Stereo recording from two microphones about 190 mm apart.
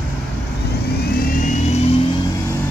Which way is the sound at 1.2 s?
40° left (ahead or behind).